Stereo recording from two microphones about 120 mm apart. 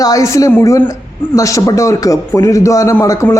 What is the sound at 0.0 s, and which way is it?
A man's voice, 30° left (ahead or behind).